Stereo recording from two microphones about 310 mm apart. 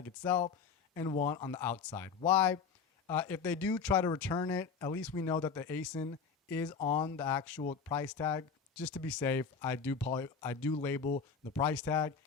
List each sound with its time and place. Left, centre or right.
0.0 s speech: centre
7.6 s speech: centre
7.9 s speech: centre